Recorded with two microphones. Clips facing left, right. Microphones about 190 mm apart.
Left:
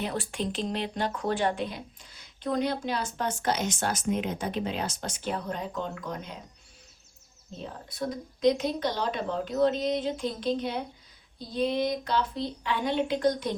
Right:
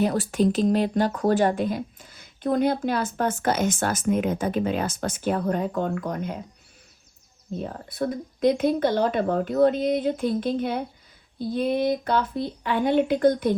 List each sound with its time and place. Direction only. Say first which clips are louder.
0.0 s speech: right 10 dB; 40° right (ahead or behind)
7.5 s speech: right 8 dB; 55° right (ahead or behind)